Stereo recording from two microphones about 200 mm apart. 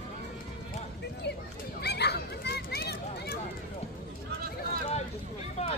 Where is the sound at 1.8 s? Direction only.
55° left (ahead or behind).